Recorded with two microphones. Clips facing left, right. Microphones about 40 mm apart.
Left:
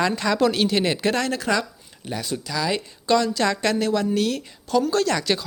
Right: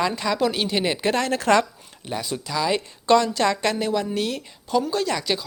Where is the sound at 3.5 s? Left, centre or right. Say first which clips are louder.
Left 1 dB; centre.